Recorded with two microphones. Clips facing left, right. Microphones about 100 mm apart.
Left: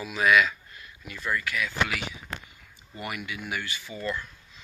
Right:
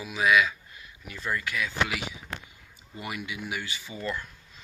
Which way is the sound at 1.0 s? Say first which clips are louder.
Left 1 dB; 25° right (ahead or behind).